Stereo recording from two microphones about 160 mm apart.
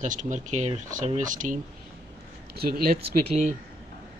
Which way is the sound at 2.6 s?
70° right (ahead or behind).